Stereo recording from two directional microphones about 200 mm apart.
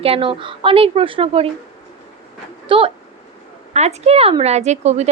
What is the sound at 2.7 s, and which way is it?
A woman's voice, 25° right (ahead or behind).